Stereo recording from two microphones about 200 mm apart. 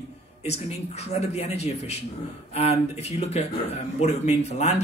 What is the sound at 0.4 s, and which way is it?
Speech, 30° left (ahead or behind).